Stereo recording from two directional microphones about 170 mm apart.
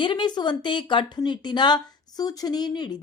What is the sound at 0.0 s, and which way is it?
Speech, 25° left (ahead or behind).